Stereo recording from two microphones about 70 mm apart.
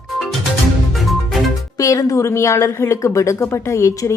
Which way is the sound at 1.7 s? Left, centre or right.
Left.